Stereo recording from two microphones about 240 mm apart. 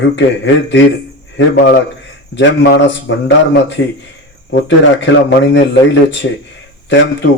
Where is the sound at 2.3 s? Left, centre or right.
Left.